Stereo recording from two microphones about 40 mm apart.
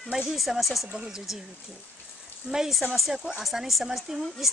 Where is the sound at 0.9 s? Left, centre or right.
Centre.